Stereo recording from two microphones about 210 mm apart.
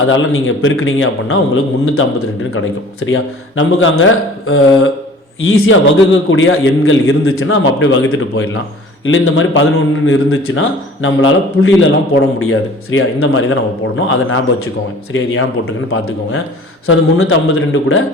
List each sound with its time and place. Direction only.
0.0 s a man's voice: 70° left (ahead or behind)